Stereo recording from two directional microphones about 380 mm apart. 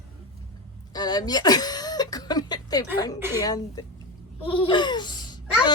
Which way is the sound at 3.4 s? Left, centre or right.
Centre.